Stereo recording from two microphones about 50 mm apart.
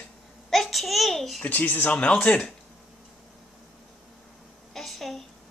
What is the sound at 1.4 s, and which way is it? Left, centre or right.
Speech, left.